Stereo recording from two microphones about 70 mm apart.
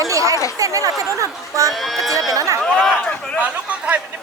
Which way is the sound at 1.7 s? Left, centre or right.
Centre.